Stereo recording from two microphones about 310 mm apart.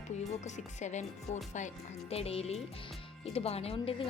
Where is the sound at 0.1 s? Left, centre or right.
Left.